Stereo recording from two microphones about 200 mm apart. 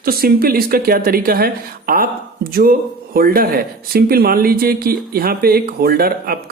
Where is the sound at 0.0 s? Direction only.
50° right (ahead or behind).